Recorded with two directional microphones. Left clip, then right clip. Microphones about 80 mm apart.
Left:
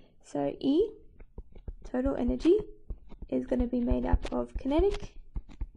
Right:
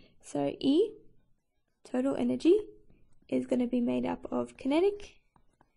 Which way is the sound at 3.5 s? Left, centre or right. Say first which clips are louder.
Even; centre.